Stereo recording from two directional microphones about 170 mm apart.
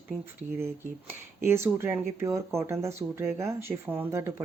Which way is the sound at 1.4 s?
15° right (ahead or behind).